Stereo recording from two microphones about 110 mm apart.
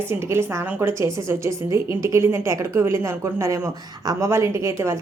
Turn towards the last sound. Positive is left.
turn(degrees=-25)  # may be behind; listen again after turning